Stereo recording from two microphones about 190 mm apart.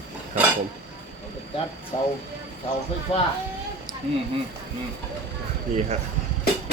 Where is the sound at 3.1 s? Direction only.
30° left (ahead or behind).